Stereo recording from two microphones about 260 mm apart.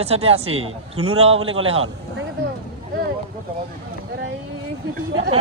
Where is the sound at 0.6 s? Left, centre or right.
Right.